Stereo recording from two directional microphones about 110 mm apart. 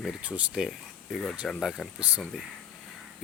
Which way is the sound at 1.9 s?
5° right (ahead or behind).